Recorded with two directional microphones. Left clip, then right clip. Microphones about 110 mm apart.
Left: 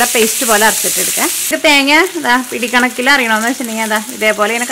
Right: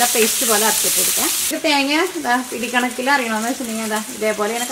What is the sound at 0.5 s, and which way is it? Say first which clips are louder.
Frying: left 6 dB; 50° left (ahead or behind).